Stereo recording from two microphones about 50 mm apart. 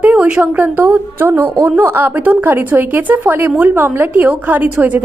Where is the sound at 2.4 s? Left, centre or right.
Right.